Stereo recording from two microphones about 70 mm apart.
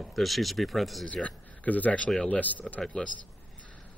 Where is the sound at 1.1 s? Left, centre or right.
Centre.